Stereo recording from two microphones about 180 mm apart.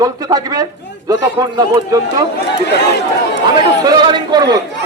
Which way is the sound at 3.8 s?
20° right (ahead or behind).